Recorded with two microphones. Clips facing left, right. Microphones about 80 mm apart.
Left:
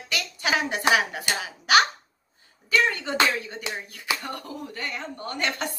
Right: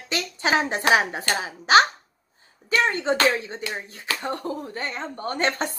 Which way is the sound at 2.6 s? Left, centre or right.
Right.